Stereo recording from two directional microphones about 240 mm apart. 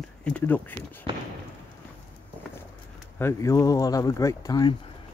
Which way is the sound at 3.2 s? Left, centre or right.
Centre.